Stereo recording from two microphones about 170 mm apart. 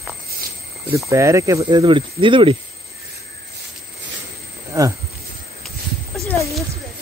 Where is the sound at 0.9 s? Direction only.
15° right (ahead or behind).